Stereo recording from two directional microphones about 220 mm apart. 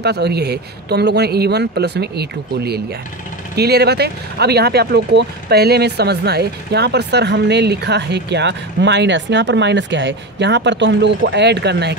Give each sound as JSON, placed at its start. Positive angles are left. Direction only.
{"t": 0.0, "sound": "speech", "side_deg": -50}